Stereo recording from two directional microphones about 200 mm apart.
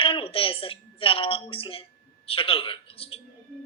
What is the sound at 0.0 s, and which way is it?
A woman's voice, 25° left (ahead or behind).